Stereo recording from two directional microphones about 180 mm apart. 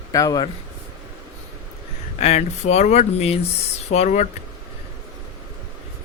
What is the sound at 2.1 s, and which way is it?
Speech, 35° left (ahead or behind).